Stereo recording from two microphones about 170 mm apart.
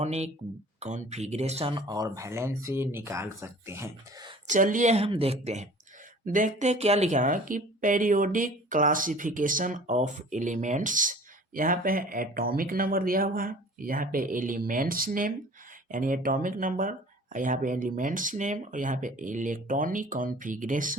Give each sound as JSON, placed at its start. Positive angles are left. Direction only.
{"t": 0.0, "sound": "speech", "side_deg": -40}
{"t": 1.9, "sound": "speech", "side_deg": -20}
{"t": 4.4, "sound": "speech", "side_deg": -50}
{"t": 6.2, "sound": "speech", "side_deg": -50}